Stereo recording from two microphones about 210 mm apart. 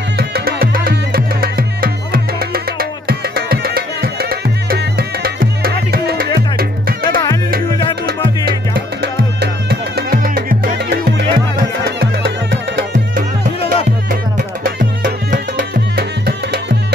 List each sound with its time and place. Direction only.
0.2 s music: 45° right (ahead or behind)
9.0 s music: 50° right (ahead or behind)
14.6 s music: 40° right (ahead or behind)